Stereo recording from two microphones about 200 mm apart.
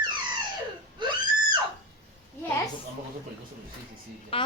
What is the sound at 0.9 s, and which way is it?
Screaming, 20° right (ahead or behind).